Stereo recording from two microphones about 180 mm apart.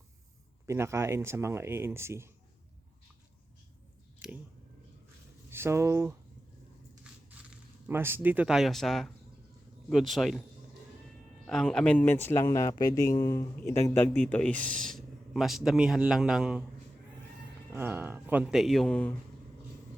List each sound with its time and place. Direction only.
0.7 s speech: 15° right (ahead or behind)
4.2 s a sound: 5° right (ahead or behind)
5.5 s speech: 15° right (ahead or behind)
7.9 s speech: 10° right (ahead or behind)
11.4 s speech: 5° left (ahead or behind)
17.7 s speech: 10° right (ahead or behind)
18.4 s speech: centre (ahead or behind)